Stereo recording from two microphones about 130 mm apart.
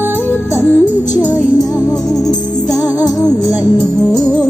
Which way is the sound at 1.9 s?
Centre (ahead or behind).